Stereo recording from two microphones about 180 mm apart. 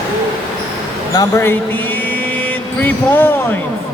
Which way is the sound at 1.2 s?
15° left (ahead or behind).